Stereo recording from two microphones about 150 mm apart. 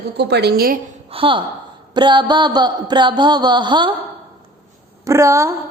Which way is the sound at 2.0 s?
30° right (ahead or behind).